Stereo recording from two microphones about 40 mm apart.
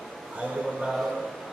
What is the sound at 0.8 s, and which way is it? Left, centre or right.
Speech, centre.